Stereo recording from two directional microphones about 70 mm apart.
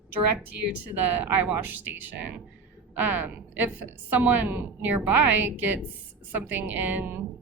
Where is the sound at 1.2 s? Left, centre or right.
Right.